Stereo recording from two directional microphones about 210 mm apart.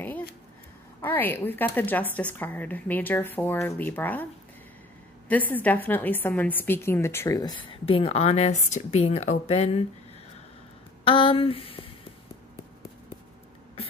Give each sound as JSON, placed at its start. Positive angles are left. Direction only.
{"t": 1.0, "sound": "a woman's voice", "side_deg": 10}
{"t": 5.3, "sound": "a woman's voice", "side_deg": 10}
{"t": 11.1, "sound": "speech", "side_deg": 25}